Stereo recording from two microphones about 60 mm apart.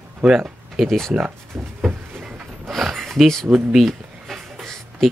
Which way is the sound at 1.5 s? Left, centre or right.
Right.